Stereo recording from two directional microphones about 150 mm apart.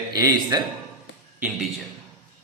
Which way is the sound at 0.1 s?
25° right (ahead or behind).